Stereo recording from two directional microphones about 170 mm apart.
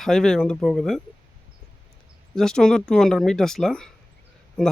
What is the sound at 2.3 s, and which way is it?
Speech, 5° left (ahead or behind).